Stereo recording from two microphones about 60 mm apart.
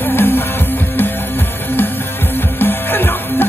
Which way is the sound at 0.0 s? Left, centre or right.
Left.